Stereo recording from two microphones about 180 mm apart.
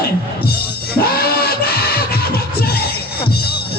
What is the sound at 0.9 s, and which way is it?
Music, 60° left (ahead or behind).